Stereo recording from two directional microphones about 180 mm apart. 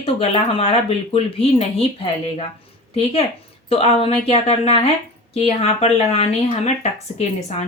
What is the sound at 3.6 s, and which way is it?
Speech, 30° left (ahead or behind).